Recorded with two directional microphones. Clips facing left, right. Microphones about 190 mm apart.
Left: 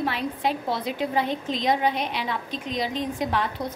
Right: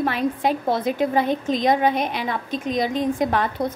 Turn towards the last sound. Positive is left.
turn(degrees=-50)  # may be behind; listen again after turning